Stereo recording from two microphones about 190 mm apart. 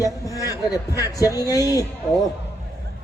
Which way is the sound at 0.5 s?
20° left (ahead or behind).